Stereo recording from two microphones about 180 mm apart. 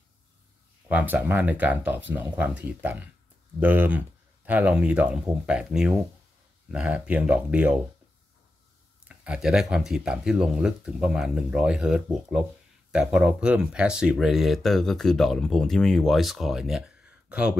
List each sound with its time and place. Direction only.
0.8 s speech: 10° right (ahead or behind)
9.0 s speech: 5° right (ahead or behind)